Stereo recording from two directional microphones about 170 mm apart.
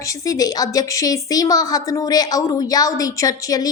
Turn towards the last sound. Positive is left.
turn(degrees=20)  # may be behind; listen again after turning